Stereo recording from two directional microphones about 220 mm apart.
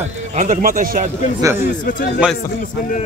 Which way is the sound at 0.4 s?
35° right (ahead or behind).